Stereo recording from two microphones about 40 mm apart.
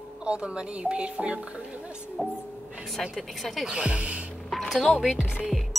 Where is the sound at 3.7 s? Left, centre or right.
Right.